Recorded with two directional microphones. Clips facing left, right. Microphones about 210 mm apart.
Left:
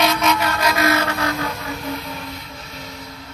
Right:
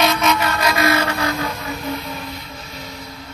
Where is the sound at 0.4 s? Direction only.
5° right (ahead or behind).